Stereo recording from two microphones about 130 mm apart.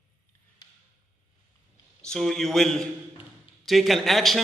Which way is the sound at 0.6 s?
35° left (ahead or behind).